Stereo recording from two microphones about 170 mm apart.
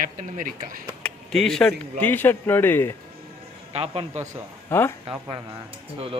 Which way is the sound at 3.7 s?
35° right (ahead or behind).